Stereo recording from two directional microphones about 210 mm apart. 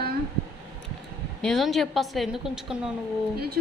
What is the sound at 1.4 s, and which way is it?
A woman's voice, centre (ahead or behind).